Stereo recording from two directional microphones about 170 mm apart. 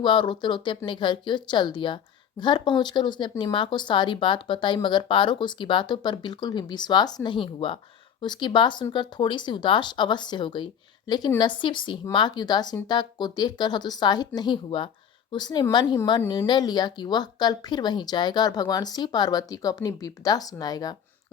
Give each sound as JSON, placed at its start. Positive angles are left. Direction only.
{"t": 0.0, "sound": "speech", "side_deg": 25}